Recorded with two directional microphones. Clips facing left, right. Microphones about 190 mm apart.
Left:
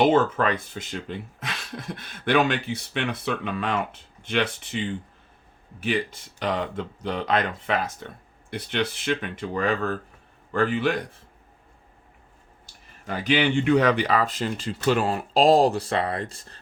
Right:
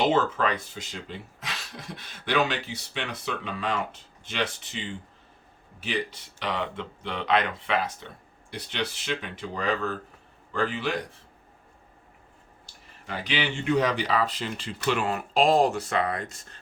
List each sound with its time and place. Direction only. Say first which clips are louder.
0.0 s speech: left 4 dB; 50° left (ahead or behind)
5.8 s speech: left 4 dB; 50° left (ahead or behind)
8.4 s speech: left 5 dB; 55° left (ahead or behind)
13.1 s speech: left 7 dB; 50° left (ahead or behind); by 16.6 s 30° left (ahead or behind)